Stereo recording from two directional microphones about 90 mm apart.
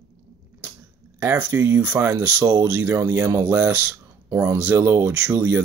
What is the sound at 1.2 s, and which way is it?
Speech, 25° right (ahead or behind).